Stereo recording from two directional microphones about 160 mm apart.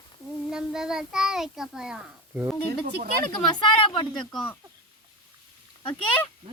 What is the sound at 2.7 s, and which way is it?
Speech, 90° right.